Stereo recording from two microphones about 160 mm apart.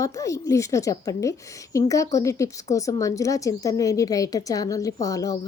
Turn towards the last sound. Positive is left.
turn(degrees=20)  # may be behind; listen again after turning